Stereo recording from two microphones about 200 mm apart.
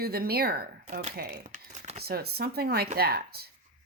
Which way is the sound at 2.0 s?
50° right (ahead or behind).